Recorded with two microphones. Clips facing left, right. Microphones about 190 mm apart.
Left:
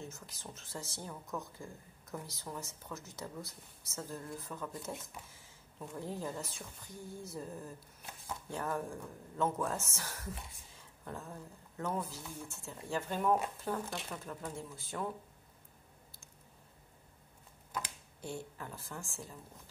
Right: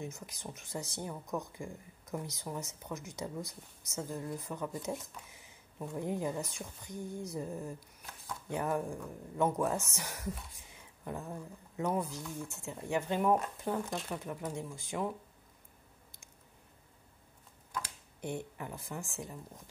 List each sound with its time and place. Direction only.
0.0 s a woman's voice: 15° right (ahead or behind)
18.2 s speech: 20° right (ahead or behind)